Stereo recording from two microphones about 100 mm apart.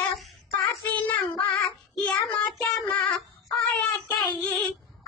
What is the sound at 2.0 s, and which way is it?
Child singing, 10° left (ahead or behind).